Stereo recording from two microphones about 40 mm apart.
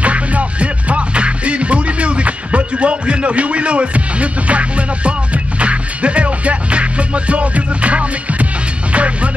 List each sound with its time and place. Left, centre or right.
0.0 s music: right